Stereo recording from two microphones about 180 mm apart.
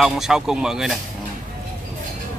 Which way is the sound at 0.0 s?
5° right (ahead or behind).